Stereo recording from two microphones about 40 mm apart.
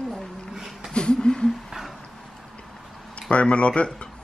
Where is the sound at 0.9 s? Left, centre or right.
Centre.